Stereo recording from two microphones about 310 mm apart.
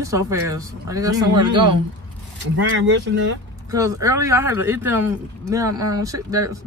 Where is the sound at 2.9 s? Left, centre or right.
Right.